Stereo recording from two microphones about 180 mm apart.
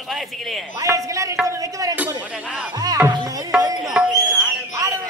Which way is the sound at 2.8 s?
20° right (ahead or behind).